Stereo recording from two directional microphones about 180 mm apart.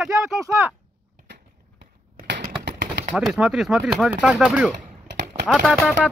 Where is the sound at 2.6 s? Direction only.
70° right (ahead or behind).